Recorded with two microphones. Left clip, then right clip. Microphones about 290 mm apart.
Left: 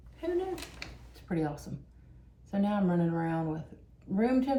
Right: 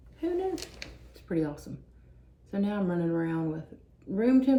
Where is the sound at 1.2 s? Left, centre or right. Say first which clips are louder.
Right 3 dB; centre.